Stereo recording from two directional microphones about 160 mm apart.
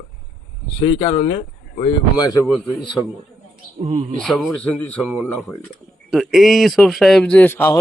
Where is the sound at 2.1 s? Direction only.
20° left (ahead or behind).